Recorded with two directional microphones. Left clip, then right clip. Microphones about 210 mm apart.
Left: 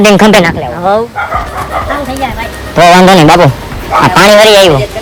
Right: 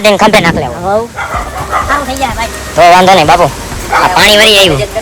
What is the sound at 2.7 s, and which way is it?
Speech, 60° left (ahead or behind).